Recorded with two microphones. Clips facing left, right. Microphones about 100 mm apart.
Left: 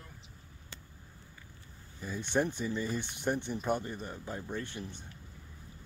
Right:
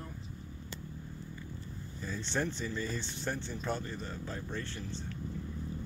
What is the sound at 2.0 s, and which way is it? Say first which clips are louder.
Speech: left 4 dB; 15° left (ahead or behind).